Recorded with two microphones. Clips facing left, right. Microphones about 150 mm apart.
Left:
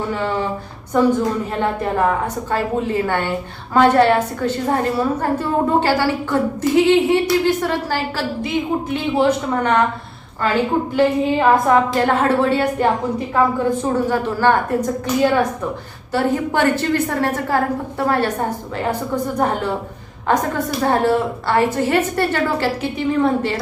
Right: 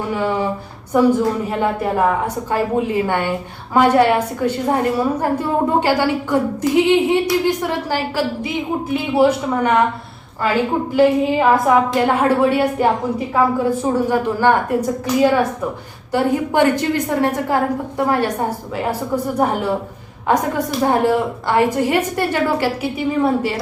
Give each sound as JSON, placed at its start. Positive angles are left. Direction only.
{"t": 0.1, "sound": "a woman's voice", "side_deg": -15}
{"t": 10.9, "sound": "a woman's voice", "side_deg": -10}